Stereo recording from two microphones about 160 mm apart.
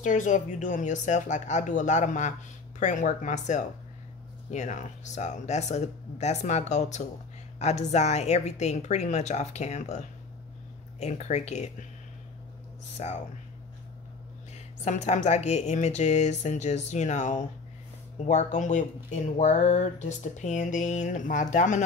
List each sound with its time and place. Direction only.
0.0 s speech: 50° left (ahead or behind)
12.9 s speech: 45° left (ahead or behind)
14.9 s speech: 45° left (ahead or behind)